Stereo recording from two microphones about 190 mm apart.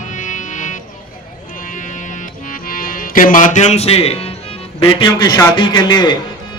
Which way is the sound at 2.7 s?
45° left (ahead or behind).